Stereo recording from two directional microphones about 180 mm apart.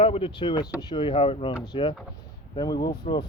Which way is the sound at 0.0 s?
30° left (ahead or behind).